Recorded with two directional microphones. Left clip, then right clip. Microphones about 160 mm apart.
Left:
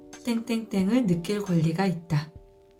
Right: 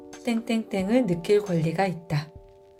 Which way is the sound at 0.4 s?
35° right (ahead or behind).